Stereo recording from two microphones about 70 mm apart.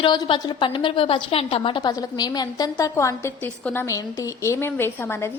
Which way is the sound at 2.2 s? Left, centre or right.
Left.